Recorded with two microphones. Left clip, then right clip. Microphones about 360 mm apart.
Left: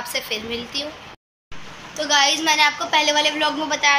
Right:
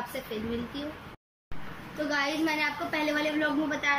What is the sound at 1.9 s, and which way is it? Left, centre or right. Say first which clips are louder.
A woman's voice: left 12 dB; left.